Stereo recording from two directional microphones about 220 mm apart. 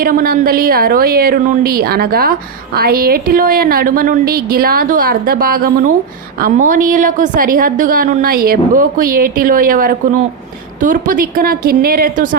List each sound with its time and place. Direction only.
0.0 s a woman's voice: 40° right (ahead or behind)